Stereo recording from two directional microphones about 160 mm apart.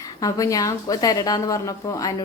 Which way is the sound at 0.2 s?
20° left (ahead or behind).